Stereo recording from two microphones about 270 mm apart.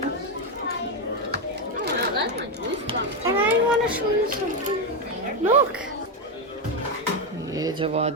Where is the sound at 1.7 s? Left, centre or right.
Right.